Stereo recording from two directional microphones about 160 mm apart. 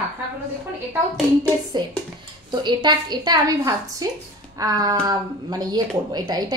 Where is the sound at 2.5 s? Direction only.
30° right (ahead or behind).